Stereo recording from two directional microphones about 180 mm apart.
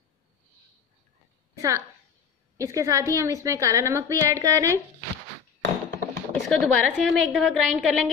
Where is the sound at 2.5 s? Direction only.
20° right (ahead or behind).